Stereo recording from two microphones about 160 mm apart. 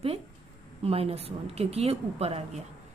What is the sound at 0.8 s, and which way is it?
A woman's voice, 40° right (ahead or behind).